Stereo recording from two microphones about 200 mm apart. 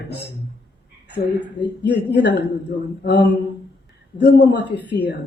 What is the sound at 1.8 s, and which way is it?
A woman's voice, 60° left (ahead or behind).